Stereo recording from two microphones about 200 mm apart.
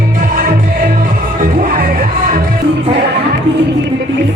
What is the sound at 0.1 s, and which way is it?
Music, 40° right (ahead or behind).